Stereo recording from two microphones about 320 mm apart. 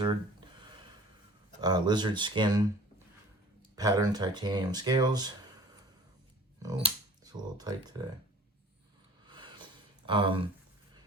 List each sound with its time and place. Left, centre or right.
0.0 s a sound: centre
1.6 s speech: centre
3.8 s speech: centre
7.3 s speech: centre
9.2 s a sound: centre
10.1 s speech: centre